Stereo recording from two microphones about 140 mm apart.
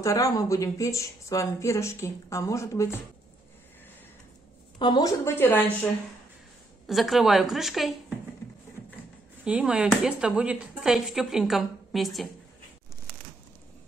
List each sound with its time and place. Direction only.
0.0 s speech: 25° left (ahead or behind)
4.7 s a woman's voice: 30° left (ahead or behind)
5.2 s speech: 15° left (ahead or behind)
6.9 s speech: centre (ahead or behind)
9.4 s speech: 10° right (ahead or behind)